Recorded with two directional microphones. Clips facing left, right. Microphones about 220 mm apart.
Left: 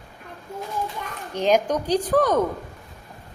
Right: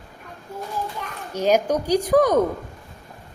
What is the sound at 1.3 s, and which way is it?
A woman's voice, 10° right (ahead or behind).